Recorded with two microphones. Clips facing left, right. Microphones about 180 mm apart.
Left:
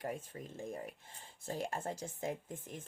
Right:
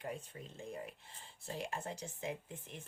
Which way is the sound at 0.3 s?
35° left (ahead or behind).